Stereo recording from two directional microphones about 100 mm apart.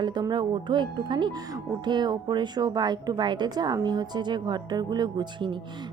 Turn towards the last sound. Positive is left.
turn(degrees=-50)  # may be behind; listen again after turning